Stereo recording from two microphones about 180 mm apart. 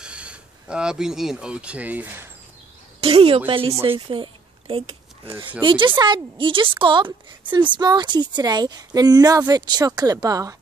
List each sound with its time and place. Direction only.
0.0 s speech: 5° right (ahead or behind)
3.0 s speech: 30° right (ahead or behind)
4.1 s a sound: 30° right (ahead or behind)
5.6 s a woman's voice: 25° right (ahead or behind)